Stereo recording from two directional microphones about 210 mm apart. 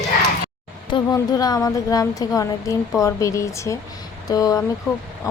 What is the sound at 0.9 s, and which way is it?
Speech, 20° left (ahead or behind).